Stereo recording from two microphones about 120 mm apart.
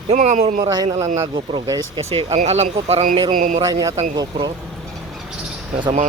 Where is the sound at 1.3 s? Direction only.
40° right (ahead or behind).